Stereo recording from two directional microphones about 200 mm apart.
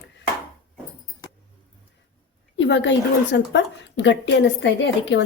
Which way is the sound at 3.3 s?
60° left (ahead or behind).